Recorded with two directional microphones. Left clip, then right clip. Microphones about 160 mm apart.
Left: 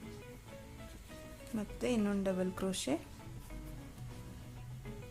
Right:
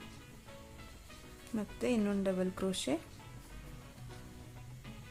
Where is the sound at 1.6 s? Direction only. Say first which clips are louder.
Right 1 dB; 15° right (ahead or behind).